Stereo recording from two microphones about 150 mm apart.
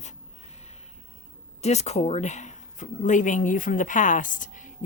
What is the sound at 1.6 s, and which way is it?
Speech, 45° left (ahead or behind).